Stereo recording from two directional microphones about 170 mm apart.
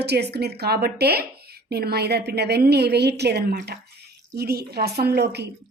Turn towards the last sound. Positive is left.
turn(degrees=-75)  # may be behind; listen again after turning